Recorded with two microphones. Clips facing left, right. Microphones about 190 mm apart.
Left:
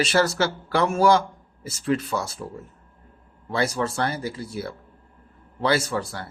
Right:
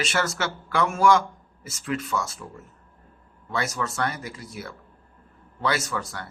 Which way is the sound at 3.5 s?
30° left (ahead or behind).